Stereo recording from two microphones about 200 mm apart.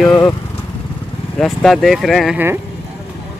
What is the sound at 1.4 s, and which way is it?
Speech, centre (ahead or behind).